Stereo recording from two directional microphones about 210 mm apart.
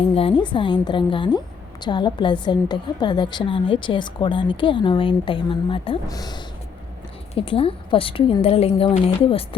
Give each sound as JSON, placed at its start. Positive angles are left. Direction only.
{"t": 0.1, "sound": "a woman's voice", "side_deg": 25}